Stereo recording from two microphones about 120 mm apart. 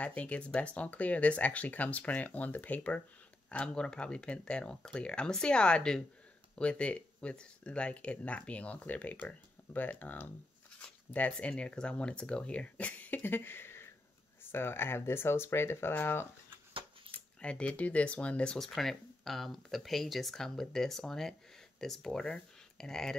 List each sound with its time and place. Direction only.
0.0 s speech: 10° left (ahead or behind)
17.4 s speech: 10° left (ahead or behind)